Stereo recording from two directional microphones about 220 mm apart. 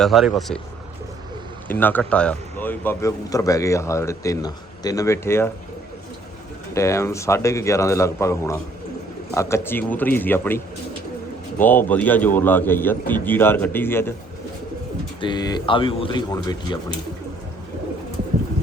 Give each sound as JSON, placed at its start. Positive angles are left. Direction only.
{"t": 0.0, "sound": "speech", "side_deg": 0}
{"t": 1.6, "sound": "a man's voice", "side_deg": 10}
{"t": 6.7, "sound": "a man's voice", "side_deg": 15}
{"t": 11.6, "sound": "a man's voice", "side_deg": 10}
{"t": 15.2, "sound": "speech", "side_deg": 20}